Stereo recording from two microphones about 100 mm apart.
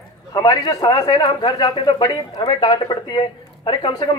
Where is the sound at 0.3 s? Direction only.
40° left (ahead or behind).